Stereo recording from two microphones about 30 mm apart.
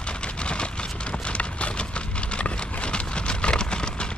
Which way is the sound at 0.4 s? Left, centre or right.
Left.